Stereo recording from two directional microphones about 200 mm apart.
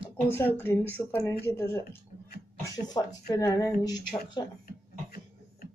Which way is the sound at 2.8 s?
15° left (ahead or behind).